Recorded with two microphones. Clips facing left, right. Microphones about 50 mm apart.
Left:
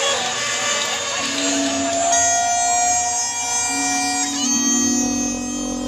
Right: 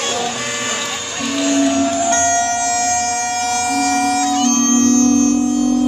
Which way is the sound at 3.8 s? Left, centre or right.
Right.